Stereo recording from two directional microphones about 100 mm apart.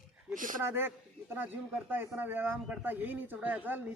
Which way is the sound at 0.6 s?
25° right (ahead or behind).